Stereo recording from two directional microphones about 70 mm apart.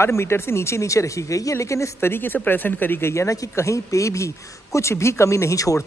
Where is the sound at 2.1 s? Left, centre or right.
Left.